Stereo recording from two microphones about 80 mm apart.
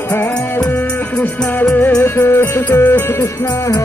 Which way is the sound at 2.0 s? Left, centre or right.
Left.